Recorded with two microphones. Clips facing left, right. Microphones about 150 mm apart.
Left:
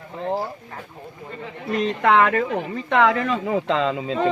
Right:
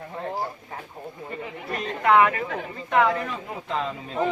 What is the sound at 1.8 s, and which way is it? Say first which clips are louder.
Speech: left 1 dB; 90° left.